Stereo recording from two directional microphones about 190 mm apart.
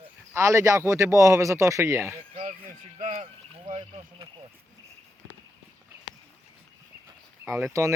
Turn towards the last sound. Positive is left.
turn(degrees=-15)  # may be behind; listen again after turning